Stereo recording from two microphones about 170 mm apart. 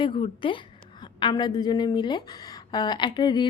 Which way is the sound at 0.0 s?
30° left (ahead or behind).